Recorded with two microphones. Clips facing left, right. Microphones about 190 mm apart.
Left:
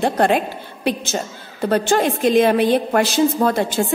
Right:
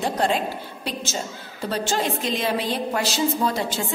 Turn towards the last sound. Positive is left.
turn(degrees=55)  # may be behind; listen again after turning